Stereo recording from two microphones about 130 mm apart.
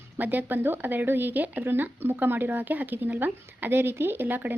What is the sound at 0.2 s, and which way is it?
Speech, 15° right (ahead or behind).